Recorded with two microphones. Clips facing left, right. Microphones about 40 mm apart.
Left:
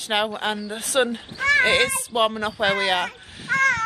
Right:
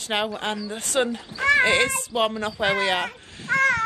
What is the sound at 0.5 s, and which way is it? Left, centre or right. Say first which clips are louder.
Speech: left 1 dB; left.